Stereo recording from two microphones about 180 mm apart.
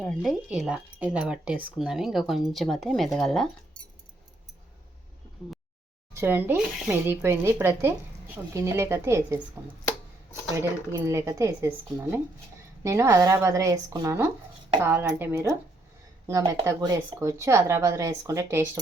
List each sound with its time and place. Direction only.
0.0 s speech: centre (ahead or behind)
6.1 s speech: 10° right (ahead or behind)
10.5 s speech: 15° right (ahead or behind)